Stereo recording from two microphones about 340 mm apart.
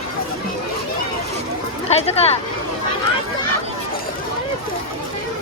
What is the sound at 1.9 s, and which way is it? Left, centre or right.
Speech, centre.